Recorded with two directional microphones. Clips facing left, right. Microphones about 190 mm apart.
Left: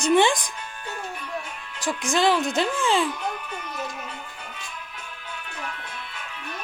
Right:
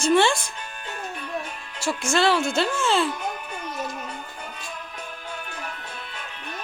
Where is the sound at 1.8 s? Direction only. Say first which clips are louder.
Even; 15° left (ahead or behind).